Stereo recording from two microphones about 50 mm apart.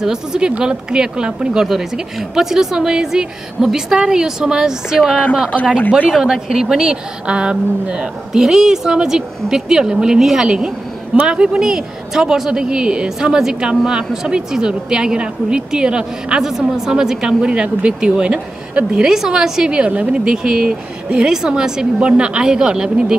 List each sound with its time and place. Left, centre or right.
0.0 s speech: centre
6.0 s speech: centre